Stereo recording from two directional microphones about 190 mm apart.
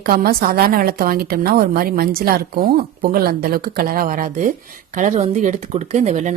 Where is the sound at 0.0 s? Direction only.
55° right (ahead or behind).